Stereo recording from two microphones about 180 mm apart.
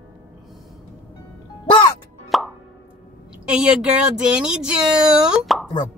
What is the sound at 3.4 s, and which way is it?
Speech, 5° right (ahead or behind).